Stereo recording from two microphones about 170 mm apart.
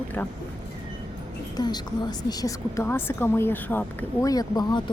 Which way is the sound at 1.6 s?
25° left (ahead or behind).